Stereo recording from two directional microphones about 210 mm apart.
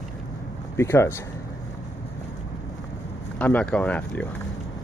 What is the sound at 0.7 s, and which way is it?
Speech, 10° left (ahead or behind).